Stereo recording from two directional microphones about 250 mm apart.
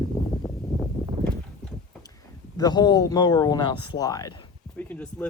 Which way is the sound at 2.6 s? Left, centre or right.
Centre.